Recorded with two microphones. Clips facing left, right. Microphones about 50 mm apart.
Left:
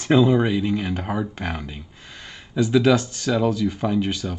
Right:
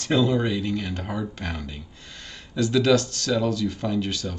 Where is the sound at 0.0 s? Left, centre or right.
Centre.